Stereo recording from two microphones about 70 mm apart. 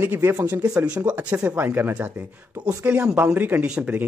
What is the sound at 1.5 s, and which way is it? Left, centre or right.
Speech, right.